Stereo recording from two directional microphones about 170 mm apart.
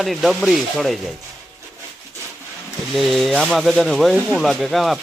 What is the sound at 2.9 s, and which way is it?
Speech, centre (ahead or behind).